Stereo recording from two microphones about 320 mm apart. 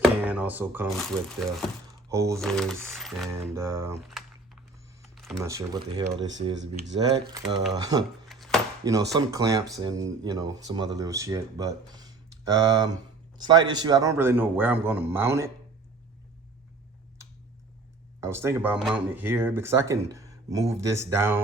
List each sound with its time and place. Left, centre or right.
0.0 s speech: centre
2.4 s speech: centre
5.1 s computer keyboard: centre
5.5 s speech: centre
6.6 s speech: right
7.3 s speech: centre
8.3 s chopping: centre
8.8 s speech: centre
18.2 s speech: centre
20.1 s a sound: centre
20.8 s speech: centre